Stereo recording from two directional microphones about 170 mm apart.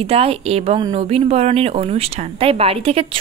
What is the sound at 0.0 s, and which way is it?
Speech, 35° right (ahead or behind).